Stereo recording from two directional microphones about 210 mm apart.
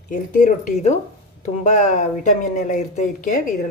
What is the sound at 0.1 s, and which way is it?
Speech, 40° left (ahead or behind).